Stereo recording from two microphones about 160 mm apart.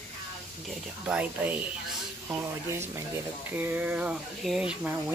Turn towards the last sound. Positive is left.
turn(degrees=-5)  # may be behind; listen again after turning